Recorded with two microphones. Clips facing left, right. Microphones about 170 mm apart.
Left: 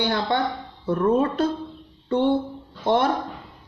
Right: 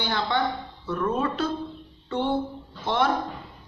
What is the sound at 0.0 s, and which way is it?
Speech, 50° left (ahead or behind).